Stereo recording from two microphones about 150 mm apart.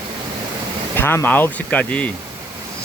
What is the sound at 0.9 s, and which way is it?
Speech, 15° left (ahead or behind).